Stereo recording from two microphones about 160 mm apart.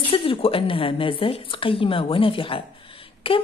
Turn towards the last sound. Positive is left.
turn(degrees=35)  # may be behind; listen again after turning